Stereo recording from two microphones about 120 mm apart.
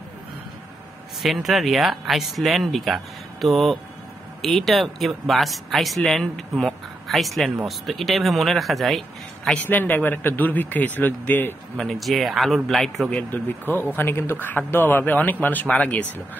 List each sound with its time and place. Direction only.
1.2 s speech: centre (ahead or behind)
11.8 s speech: centre (ahead or behind)
13.1 s speech: 15° left (ahead or behind)